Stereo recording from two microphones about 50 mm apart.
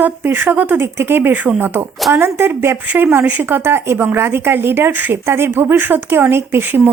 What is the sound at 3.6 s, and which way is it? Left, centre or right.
Speech, right.